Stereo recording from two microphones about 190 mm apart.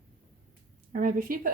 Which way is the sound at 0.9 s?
50° right (ahead or behind).